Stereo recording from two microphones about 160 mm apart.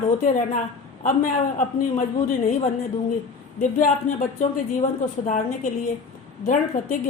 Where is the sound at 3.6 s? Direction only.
50° left (ahead or behind).